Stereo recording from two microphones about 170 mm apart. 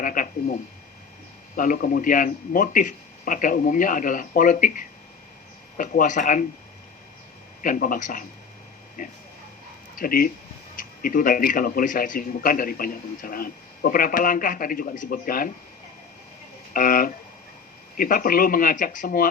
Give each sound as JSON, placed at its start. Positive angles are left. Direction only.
{"t": 0.0, "sound": "speech", "side_deg": 50}
{"t": 1.5, "sound": "a man's voice", "side_deg": 55}
{"t": 7.6, "sound": "a man's voice", "side_deg": 55}
{"t": 16.7, "sound": "speech", "side_deg": 55}